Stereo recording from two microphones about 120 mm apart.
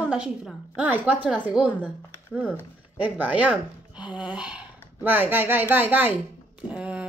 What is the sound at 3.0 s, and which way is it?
Speech, 15° right (ahead or behind).